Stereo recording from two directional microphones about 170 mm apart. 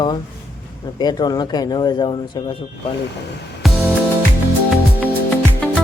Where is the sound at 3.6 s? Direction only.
Centre (ahead or behind).